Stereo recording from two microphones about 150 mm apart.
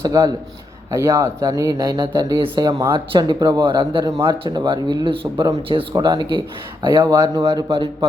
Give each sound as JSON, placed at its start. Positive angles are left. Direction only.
{"t": 0.0, "sound": "speech", "side_deg": -25}